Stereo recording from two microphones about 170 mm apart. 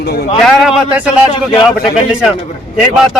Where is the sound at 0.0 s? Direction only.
70° left (ahead or behind).